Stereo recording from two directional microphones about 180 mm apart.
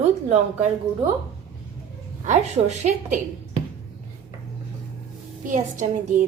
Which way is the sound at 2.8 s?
40° right (ahead or behind).